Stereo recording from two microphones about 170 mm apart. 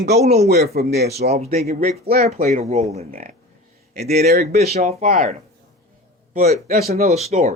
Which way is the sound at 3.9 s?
70° right (ahead or behind).